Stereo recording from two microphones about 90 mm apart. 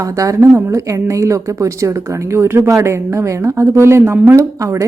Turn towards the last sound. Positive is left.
turn(degrees=-35)  # may be behind; listen again after turning